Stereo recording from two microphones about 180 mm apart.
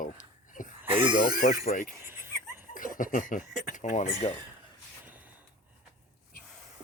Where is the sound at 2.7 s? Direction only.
50° left (ahead or behind).